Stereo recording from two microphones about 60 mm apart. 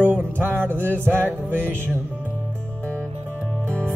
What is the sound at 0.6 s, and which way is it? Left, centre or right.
Music, right.